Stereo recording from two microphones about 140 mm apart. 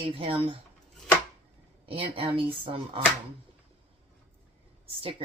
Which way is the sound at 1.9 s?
40° right (ahead or behind).